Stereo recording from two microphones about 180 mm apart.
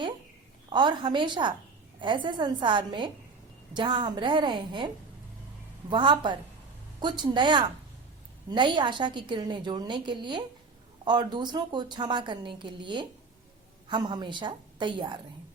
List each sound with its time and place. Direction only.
0.7 s a woman's voice: 25° right (ahead or behind)
5.9 s a woman's voice: 25° right (ahead or behind)